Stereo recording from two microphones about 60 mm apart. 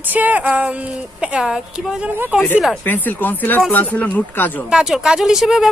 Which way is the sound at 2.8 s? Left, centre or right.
Left.